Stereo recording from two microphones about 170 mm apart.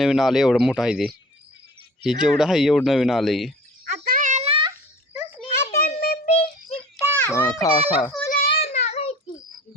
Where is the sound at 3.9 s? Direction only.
55° right (ahead or behind); by 4.7 s 30° right (ahead or behind).